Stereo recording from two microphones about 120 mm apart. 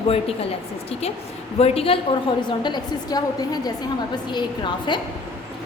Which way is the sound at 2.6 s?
35° left (ahead or behind).